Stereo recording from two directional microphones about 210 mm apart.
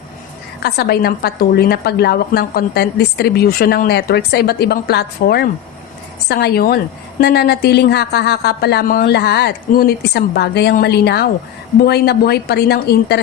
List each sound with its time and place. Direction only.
0.6 s a woman's voice: 50° left (ahead or behind)